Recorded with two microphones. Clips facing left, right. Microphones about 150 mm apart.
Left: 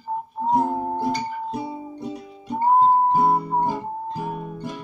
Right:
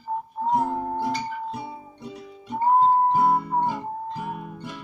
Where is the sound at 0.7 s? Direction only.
15° left (ahead or behind).